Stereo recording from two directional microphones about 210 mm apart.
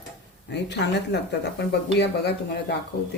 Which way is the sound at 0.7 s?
55° left (ahead or behind).